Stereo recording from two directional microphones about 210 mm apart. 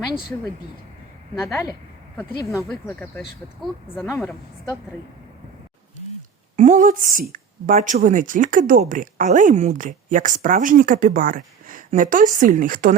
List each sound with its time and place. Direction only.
1.4 s speech: 10° left (ahead or behind)
6.6 s a woman's voice: 35° right (ahead or behind)